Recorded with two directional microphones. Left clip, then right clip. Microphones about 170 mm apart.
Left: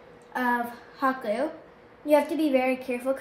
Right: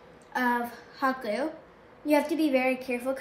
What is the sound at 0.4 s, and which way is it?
A woman's voice, 15° left (ahead or behind).